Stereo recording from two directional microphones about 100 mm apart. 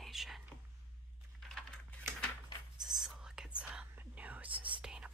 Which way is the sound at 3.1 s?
5° right (ahead or behind).